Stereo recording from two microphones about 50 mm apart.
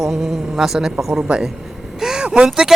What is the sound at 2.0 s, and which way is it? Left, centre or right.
Vehicle, centre.